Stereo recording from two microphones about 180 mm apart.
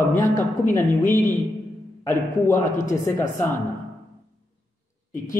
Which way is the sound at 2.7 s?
45° left (ahead or behind).